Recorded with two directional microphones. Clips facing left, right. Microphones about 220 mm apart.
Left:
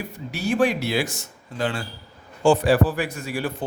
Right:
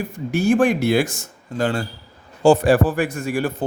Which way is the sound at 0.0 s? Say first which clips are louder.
Right 8 dB; 50° right (ahead or behind).